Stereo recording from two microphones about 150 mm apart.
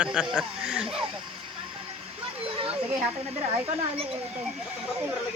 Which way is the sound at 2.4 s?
35° right (ahead or behind).